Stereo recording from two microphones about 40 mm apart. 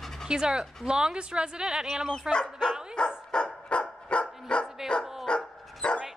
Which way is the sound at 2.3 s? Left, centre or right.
Centre.